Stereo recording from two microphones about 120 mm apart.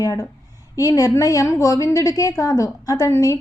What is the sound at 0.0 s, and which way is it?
A woman's voice, 30° left (ahead or behind).